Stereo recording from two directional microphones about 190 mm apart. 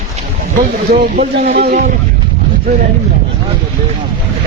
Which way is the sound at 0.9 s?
45° right (ahead or behind).